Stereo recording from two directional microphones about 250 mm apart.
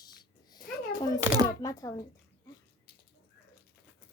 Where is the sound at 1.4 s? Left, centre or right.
Centre.